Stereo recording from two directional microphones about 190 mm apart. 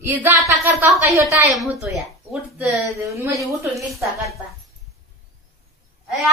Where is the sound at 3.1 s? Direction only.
15° right (ahead or behind).